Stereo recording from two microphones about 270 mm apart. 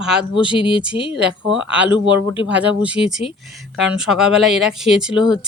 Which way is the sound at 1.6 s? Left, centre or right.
Centre.